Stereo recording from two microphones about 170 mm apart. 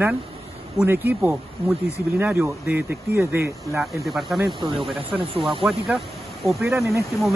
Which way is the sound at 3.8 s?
Centre (ahead or behind).